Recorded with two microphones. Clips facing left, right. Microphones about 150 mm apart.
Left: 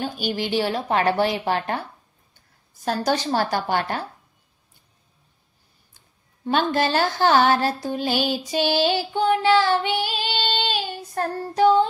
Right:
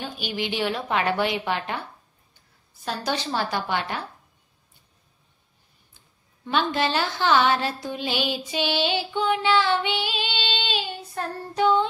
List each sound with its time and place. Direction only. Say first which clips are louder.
0.0 s a woman's voice: left 4 dB; 40° left (ahead or behind)
2.8 s a woman's voice: left 5 dB; 45° left (ahead or behind)
6.4 s speech: left 3 dB; 45° left (ahead or behind)